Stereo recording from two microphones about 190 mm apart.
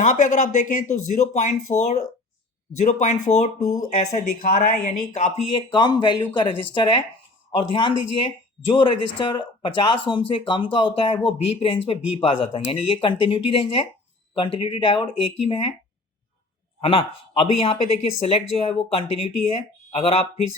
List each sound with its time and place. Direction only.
0.0 s speech: 40° left (ahead or behind)
16.8 s speech: 30° left (ahead or behind)